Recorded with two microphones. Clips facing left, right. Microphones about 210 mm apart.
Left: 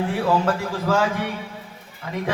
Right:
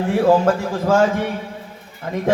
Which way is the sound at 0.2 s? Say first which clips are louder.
Right 8 dB; 45° right (ahead or behind).